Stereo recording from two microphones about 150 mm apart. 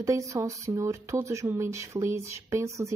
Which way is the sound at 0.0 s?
20° right (ahead or behind).